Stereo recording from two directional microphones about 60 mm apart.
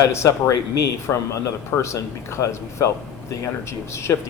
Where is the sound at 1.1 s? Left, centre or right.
Left.